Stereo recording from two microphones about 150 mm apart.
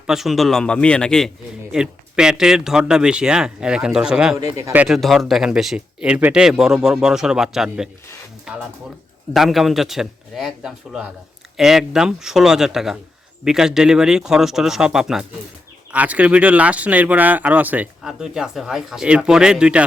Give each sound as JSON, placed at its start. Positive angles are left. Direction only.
{"t": 0.1, "sound": "speech", "side_deg": 0}
{"t": 4.4, "sound": "speech", "side_deg": -20}
{"t": 4.8, "sound": "speech", "side_deg": 0}